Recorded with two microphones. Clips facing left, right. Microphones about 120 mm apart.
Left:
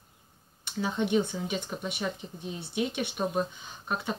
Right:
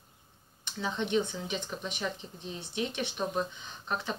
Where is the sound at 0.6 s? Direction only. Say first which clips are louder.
Left 4 dB; 10° left (ahead or behind).